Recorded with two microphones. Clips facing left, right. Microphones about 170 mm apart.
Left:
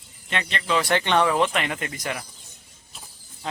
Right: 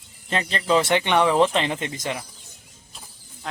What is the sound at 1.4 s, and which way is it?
Speech, 30° right (ahead or behind).